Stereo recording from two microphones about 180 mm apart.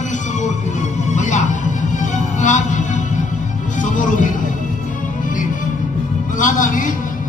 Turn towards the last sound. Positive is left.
turn(degrees=50)  # may be behind; listen again after turning